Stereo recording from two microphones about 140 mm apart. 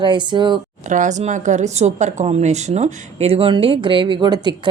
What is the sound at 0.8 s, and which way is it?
A woman's voice, 60° right (ahead or behind).